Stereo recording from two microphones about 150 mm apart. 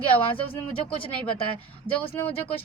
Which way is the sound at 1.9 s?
35° left (ahead or behind).